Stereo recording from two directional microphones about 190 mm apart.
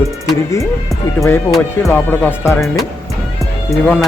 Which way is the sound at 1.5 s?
5° left (ahead or behind).